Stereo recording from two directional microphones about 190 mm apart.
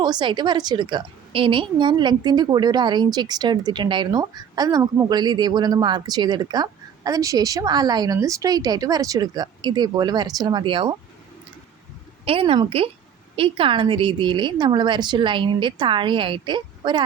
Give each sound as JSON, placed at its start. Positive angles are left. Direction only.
{"t": 0.0, "sound": "a woman's voice", "side_deg": -25}
{"t": 12.2, "sound": "a woman's voice", "side_deg": -30}